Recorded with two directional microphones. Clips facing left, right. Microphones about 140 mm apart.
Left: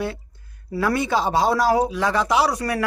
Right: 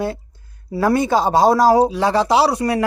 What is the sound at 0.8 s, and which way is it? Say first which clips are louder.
Speech: right 5 dB; 40° right (ahead or behind).